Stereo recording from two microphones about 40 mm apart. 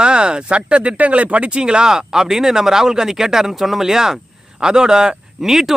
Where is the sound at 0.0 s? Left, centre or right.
Right.